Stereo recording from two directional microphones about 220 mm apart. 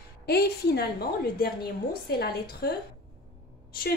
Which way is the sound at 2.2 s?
45° left (ahead or behind).